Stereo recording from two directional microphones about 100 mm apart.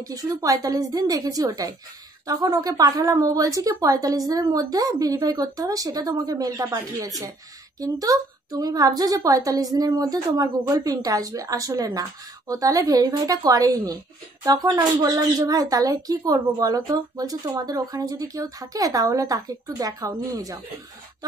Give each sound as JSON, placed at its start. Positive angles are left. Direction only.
{"t": 0.1, "sound": "speech", "side_deg": -35}